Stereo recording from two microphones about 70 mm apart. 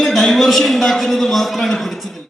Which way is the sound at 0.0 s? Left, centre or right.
Centre.